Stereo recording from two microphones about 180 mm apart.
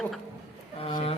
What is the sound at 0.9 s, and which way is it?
Speech, 35° left (ahead or behind).